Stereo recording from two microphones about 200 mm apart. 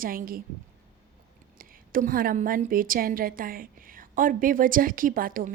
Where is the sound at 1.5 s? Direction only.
45° right (ahead or behind).